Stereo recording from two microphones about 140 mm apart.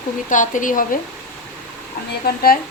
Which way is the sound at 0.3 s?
65° left (ahead or behind).